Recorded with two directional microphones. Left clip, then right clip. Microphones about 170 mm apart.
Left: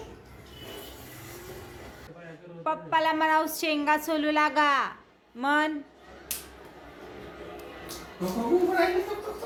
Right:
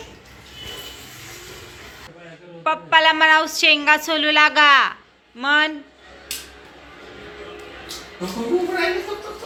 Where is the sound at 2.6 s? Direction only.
Centre (ahead or behind).